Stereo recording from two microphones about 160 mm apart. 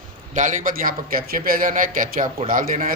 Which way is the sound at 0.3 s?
55° right (ahead or behind).